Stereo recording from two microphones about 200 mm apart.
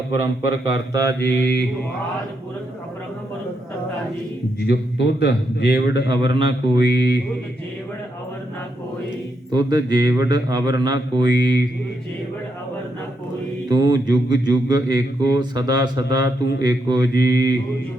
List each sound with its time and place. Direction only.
0.4 s speech: 15° right (ahead or behind)
1.3 s a man's voice: 55° left (ahead or behind)
4.6 s a man's voice: 55° left (ahead or behind)
6.7 s music: 55° left (ahead or behind)
9.5 s speech: 20° right (ahead or behind)
11.3 s a man's voice: 55° left (ahead or behind)
13.7 s speech: 20° right (ahead or behind)